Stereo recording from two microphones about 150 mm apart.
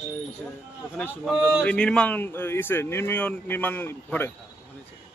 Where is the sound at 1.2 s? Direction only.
5° right (ahead or behind).